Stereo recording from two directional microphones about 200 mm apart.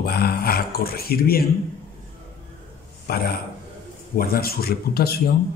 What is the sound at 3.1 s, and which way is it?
A man's voice, 50° left (ahead or behind).